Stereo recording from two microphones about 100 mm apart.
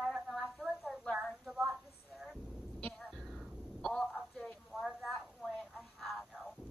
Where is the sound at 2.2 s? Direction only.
Centre (ahead or behind).